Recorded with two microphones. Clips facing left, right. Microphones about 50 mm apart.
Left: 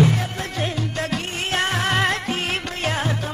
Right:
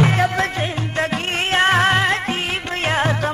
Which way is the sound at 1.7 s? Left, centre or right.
Right.